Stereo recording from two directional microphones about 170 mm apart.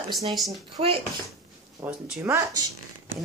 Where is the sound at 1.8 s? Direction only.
15° right (ahead or behind).